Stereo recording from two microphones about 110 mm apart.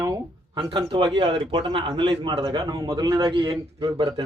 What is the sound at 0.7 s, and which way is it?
A man's voice, 45° right (ahead or behind).